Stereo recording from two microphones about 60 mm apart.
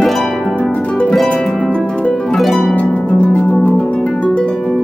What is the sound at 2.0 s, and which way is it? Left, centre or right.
Harp, centre.